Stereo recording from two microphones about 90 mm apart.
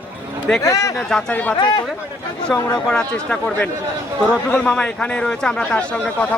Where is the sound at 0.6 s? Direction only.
35° left (ahead or behind).